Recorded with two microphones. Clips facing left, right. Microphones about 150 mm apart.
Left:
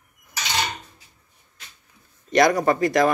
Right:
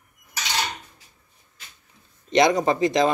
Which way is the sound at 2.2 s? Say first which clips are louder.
Left 1 dB; 20° right (ahead or behind).